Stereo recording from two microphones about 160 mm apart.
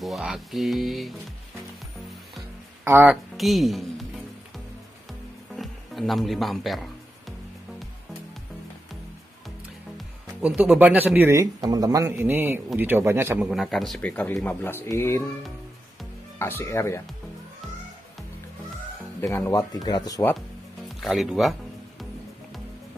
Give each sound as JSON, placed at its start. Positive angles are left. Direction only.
{"t": 0.0, "sound": "speech", "side_deg": 0}
{"t": 2.8, "sound": "speech", "side_deg": -10}
{"t": 3.3, "sound": "speech", "side_deg": 0}
{"t": 5.6, "sound": "music", "side_deg": 0}
{"t": 9.9, "sound": "speech", "side_deg": -5}
{"t": 13.5, "sound": "speech", "side_deg": 0}
{"t": 16.3, "sound": "speech", "side_deg": 15}
{"t": 19.2, "sound": "speech", "side_deg": 20}
{"t": 21.0, "sound": "speech", "side_deg": 0}